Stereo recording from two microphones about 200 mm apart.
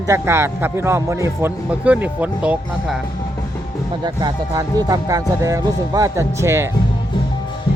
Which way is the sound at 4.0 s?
20° right (ahead or behind).